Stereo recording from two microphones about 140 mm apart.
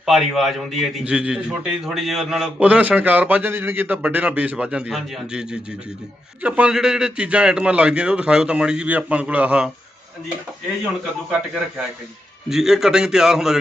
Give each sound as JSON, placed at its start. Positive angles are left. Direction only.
{"t": 0.0, "sound": "a man's voice", "side_deg": 0}
{"t": 12.5, "sound": "a man's voice", "side_deg": -5}